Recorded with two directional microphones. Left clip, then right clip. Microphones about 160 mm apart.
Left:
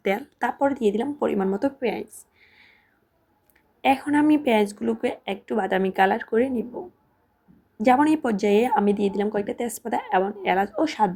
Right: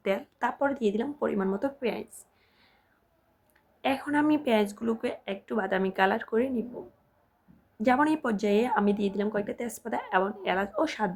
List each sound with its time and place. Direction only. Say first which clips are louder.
0.0 s speech: left 4 dB; 20° left (ahead or behind)
2.1 s a sound: left 6 dB; 20° left (ahead or behind)
3.8 s speech: left 7 dB; 20° left (ahead or behind)
7.8 s speech: left 6 dB; 20° left (ahead or behind)